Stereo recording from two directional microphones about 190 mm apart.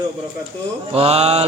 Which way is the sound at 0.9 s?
30° right (ahead or behind).